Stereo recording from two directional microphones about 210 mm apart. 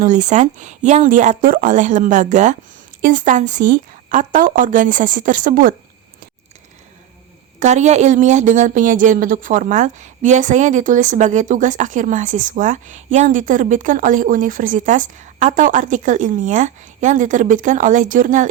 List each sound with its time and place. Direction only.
0.0 s speech: 35° right (ahead or behind)
7.6 s speech: 35° right (ahead or behind)